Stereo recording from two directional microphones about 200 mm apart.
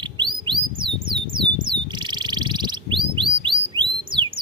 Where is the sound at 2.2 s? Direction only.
20° right (ahead or behind).